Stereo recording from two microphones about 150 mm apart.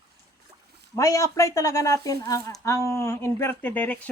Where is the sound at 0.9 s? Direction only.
20° left (ahead or behind).